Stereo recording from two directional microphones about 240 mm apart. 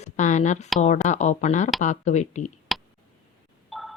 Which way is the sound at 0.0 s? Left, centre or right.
Left.